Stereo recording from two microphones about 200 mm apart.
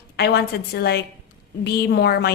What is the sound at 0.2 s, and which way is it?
A woman's voice, 55° left (ahead or behind).